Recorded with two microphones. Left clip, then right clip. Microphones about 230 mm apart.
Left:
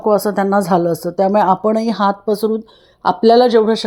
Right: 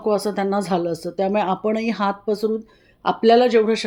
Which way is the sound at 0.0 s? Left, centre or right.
Left.